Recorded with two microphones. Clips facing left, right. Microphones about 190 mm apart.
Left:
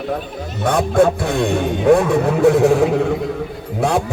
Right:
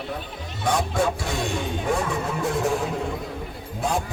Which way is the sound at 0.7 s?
55° left (ahead or behind).